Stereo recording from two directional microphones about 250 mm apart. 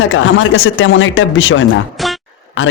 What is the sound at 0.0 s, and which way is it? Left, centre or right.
A man's voice, left.